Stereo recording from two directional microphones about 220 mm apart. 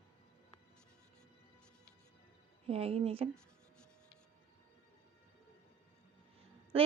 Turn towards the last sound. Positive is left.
turn(degrees=-25)  # may be behind; listen again after turning